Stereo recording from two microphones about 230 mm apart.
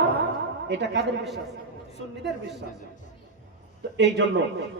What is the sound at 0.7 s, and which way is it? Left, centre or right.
Speech, right.